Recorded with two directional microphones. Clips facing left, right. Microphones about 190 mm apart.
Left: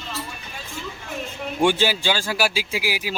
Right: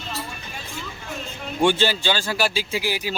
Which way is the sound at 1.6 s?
10° left (ahead or behind).